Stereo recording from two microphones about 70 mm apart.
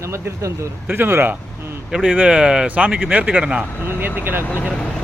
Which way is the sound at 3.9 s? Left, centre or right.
Right.